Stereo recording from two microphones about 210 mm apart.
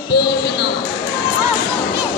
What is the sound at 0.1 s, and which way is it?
Music, 55° left (ahead or behind).